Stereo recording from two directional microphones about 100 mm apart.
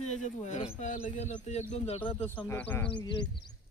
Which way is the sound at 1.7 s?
90° left.